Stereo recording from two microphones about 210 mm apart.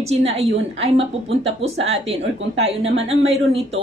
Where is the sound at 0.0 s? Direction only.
30° right (ahead or behind).